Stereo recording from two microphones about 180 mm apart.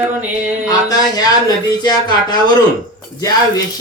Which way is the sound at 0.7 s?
20° left (ahead or behind).